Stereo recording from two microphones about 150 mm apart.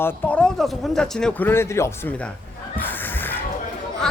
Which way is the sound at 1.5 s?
15° left (ahead or behind).